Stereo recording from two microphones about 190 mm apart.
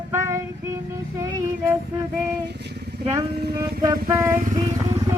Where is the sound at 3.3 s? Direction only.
55° right (ahead or behind).